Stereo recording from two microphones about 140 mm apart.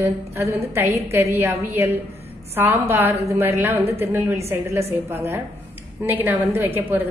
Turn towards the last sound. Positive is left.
turn(degrees=-15)  # may be behind; listen again after turning